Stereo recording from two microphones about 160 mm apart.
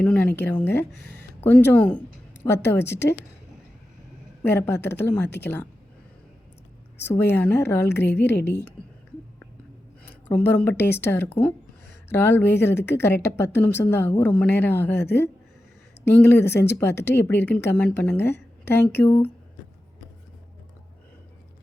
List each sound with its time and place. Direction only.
0.0 s a woman's voice: 10° left (ahead or behind)
4.4 s speech: 15° left (ahead or behind)
7.0 s speech: 15° left (ahead or behind)
8.4 s a woman's voice: 90° left
10.0 s speech: 10° left (ahead or behind)
16.0 s speech: 10° left (ahead or behind)